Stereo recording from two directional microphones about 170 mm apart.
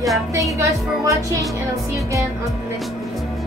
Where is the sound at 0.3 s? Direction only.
20° right (ahead or behind).